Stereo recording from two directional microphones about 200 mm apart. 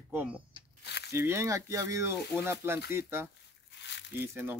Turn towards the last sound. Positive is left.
turn(degrees=-10)  # may be behind; listen again after turning